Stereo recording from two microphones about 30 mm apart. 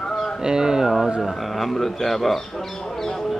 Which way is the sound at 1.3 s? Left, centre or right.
Centre.